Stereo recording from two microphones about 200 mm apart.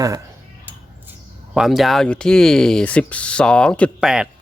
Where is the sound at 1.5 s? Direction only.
Centre (ahead or behind).